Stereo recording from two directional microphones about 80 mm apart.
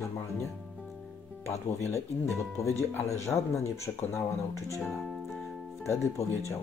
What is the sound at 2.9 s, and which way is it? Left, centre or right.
Speech, left.